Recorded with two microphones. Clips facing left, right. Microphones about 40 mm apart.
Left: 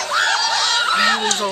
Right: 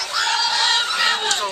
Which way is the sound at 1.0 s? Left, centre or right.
Centre.